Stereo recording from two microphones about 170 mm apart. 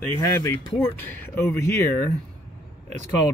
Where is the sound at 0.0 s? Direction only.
15° left (ahead or behind).